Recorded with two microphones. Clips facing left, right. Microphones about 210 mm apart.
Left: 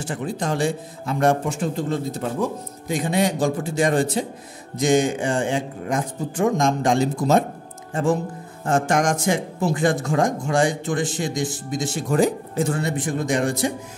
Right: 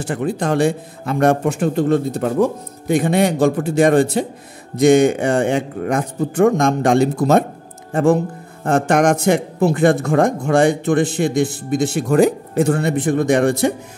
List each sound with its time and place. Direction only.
0.0 s a man's voice: 60° right (ahead or behind)